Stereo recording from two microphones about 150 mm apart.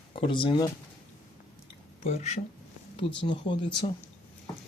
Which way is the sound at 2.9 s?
35° left (ahead or behind).